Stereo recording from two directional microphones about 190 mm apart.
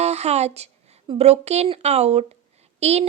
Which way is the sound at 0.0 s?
35° right (ahead or behind).